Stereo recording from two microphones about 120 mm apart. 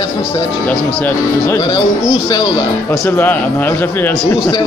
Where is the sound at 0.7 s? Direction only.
15° left (ahead or behind).